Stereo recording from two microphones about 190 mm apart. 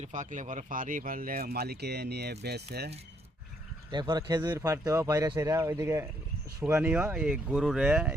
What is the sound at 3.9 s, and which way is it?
Speech, 20° right (ahead or behind).